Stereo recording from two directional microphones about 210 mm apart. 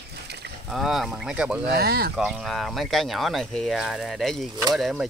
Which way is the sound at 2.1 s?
5° right (ahead or behind).